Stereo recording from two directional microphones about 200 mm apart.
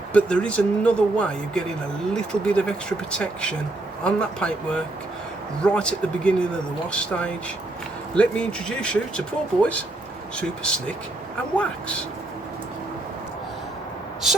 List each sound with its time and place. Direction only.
0.1 s speech: 5° left (ahead or behind)